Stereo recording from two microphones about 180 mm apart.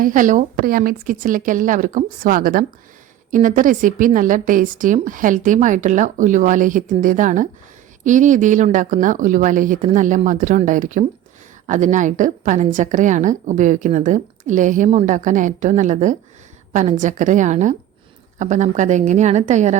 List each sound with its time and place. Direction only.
0.0 s a woman's voice: 45° right (ahead or behind)